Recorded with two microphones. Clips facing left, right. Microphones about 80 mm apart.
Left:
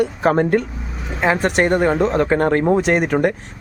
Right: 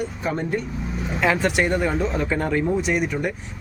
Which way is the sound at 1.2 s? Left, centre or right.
Left.